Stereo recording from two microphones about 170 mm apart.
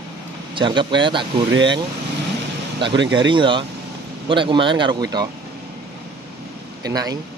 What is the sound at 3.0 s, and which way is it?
Speech, 90° right.